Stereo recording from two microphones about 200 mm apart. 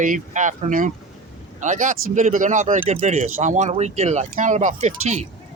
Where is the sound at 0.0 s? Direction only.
40° right (ahead or behind).